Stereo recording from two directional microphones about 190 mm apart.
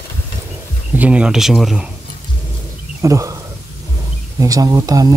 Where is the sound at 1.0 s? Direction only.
5° right (ahead or behind).